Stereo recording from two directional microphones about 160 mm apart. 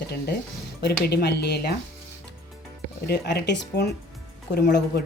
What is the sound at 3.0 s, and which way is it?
A woman's voice, 90° left.